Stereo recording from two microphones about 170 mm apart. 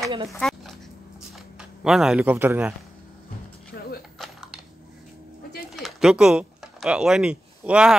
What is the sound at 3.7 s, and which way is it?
Music, 90° left.